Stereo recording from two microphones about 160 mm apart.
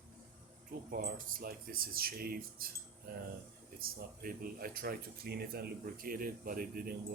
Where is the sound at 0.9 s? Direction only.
65° right (ahead or behind).